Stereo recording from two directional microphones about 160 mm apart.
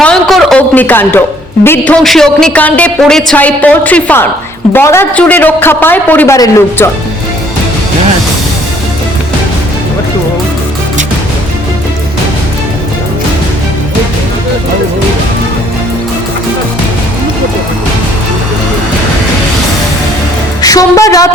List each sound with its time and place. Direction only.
0.0 s a sound: 5° left (ahead or behind)
0.8 s a man's voice: 10° left (ahead or behind)
20.6 s music: 20° left (ahead or behind)